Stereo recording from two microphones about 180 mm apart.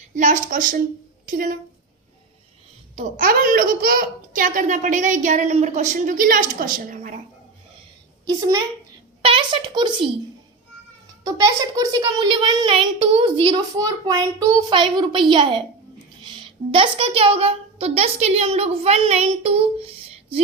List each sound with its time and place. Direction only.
0.2 s a child's voice: 45° right (ahead or behind)
2.9 s a child's voice: 45° right (ahead or behind)
8.4 s a child's voice: 20° right (ahead or behind)
11.2 s a child's voice: 20° right (ahead or behind)